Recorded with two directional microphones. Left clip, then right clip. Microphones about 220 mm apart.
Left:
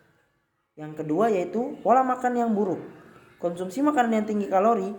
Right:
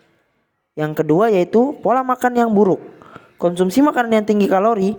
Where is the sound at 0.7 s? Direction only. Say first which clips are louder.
Right 10 dB; 45° right (ahead or behind).